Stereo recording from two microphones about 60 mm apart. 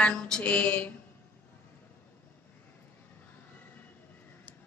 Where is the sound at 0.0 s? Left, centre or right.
Centre.